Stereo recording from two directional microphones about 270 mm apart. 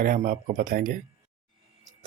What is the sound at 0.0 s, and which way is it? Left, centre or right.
Speech, right.